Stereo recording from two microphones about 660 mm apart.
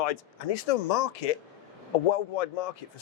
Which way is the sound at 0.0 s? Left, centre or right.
Left.